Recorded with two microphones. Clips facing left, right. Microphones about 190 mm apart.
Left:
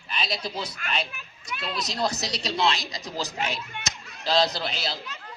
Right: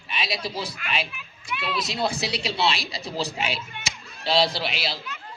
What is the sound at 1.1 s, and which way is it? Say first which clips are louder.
Children playing: right 3 dB; 45° left (ahead or behind).